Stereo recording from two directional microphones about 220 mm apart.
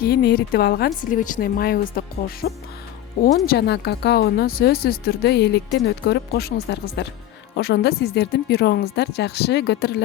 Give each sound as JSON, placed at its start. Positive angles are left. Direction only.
{"t": 0.0, "sound": "speech", "side_deg": 45}